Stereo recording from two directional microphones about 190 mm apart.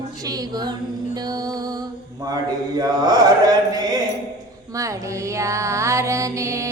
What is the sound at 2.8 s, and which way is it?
Mantra, 20° right (ahead or behind).